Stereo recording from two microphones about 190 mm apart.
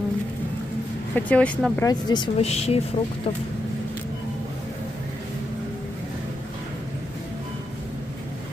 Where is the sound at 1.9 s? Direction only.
20° left (ahead or behind).